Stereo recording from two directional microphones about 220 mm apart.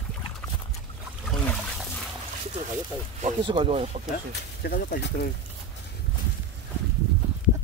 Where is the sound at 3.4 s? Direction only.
20° right (ahead or behind).